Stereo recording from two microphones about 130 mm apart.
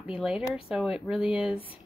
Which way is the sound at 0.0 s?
5° right (ahead or behind).